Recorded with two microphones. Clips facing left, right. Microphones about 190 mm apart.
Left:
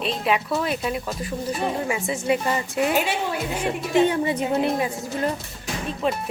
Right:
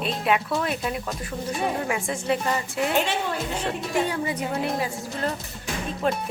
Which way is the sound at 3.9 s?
20° left (ahead or behind).